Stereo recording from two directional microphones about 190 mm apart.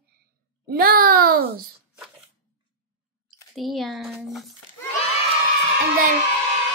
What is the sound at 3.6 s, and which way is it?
Speech, centre (ahead or behind).